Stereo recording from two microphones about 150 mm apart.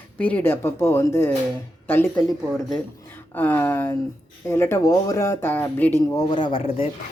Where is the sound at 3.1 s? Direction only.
15° left (ahead or behind); by 6.9 s 35° left (ahead or behind).